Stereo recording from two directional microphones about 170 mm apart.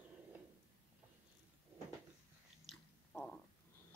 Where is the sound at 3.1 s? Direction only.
10° left (ahead or behind).